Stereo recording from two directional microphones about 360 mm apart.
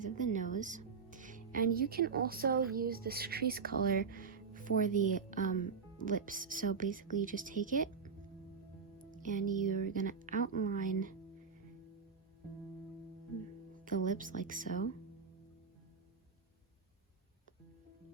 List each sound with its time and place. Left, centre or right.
0.0 s speech: right
9.2 s speech: right
13.8 s speech: right